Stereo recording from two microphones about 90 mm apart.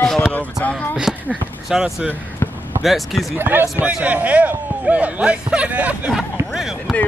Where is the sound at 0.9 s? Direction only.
10° right (ahead or behind).